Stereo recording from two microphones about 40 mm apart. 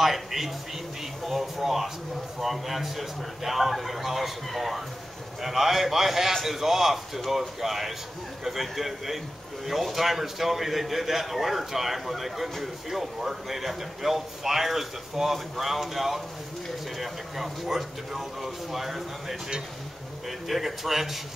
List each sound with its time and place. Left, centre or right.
0.0 s a man's voice: centre